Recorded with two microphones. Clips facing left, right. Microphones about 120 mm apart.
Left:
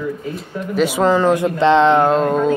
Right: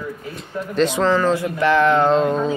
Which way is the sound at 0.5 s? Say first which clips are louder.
Left 1 dB; 5° left (ahead or behind).